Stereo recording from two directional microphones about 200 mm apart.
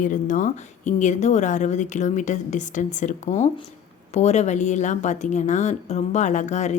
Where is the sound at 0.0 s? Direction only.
40° left (ahead or behind).